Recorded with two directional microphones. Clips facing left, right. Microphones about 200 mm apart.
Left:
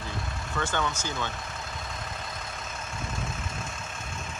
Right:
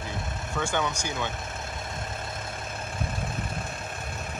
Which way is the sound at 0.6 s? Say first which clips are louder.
Right 1 dB; 15° right (ahead or behind).